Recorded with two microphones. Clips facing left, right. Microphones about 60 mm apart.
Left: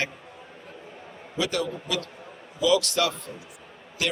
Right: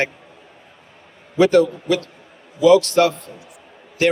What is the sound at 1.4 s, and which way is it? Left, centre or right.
Speech, right.